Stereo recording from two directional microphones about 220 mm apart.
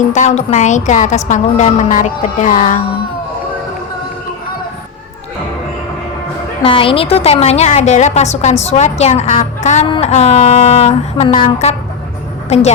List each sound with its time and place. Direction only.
0.1 s a woman's voice: 35° left (ahead or behind)
6.6 s a woman's voice: 25° left (ahead or behind)